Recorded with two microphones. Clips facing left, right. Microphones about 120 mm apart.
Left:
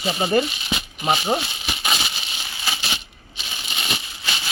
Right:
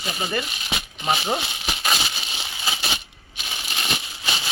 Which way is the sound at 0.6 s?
Centre (ahead or behind).